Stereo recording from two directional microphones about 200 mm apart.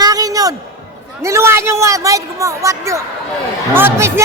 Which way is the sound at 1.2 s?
15° right (ahead or behind).